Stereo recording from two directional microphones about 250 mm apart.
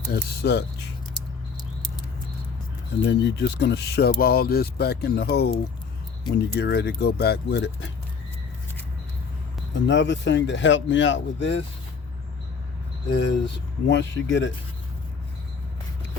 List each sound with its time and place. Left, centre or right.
0.1 s speech: left
3.1 s speech: left
9.8 s speech: left
13.1 s speech: left